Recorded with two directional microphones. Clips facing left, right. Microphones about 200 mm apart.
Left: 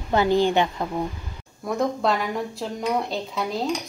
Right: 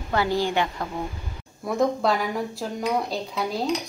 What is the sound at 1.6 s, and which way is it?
Speech, centre (ahead or behind).